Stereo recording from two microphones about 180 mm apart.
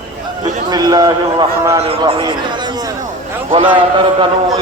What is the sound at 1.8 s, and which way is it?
Speech, 30° right (ahead or behind).